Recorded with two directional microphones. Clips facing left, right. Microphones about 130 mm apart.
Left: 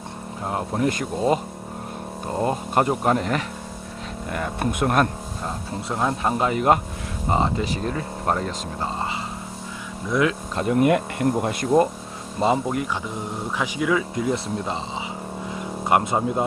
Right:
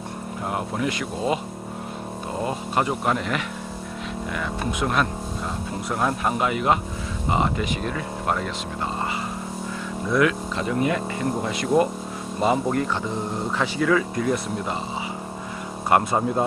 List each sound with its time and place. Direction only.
0.5 s speech: 45° left (ahead or behind)
2.4 s speech: 45° left (ahead or behind)
4.4 s speech: 55° left (ahead or behind)
5.9 s speech: 20° left (ahead or behind)
6.4 s speech: 40° left (ahead or behind)
10.1 s speech: 20° left (ahead or behind)
10.5 s speech: 50° left (ahead or behind)
12.4 s speech: 30° left (ahead or behind)
13.6 s speech: 15° left (ahead or behind)
15.9 s speech: 15° left (ahead or behind)